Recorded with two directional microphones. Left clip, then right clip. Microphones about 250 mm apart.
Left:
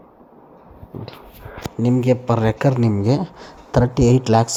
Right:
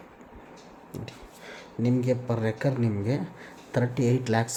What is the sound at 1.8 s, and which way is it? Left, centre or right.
Speech, left.